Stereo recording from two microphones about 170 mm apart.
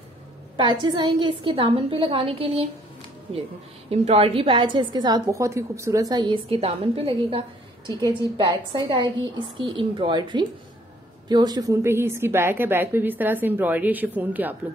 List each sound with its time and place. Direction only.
0.6 s a woman's voice: 25° right (ahead or behind)
3.9 s a woman's voice: 35° right (ahead or behind); by 14.6 s 10° right (ahead or behind)